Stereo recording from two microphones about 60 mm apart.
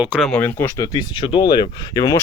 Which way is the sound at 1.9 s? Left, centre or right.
Left.